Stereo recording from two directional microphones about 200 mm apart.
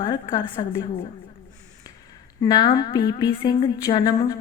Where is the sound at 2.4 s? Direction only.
20° left (ahead or behind).